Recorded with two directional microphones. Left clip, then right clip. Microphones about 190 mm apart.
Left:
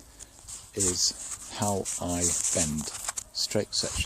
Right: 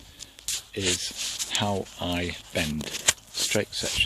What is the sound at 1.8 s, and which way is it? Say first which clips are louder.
Speech: right 1 dB; centre (ahead or behind).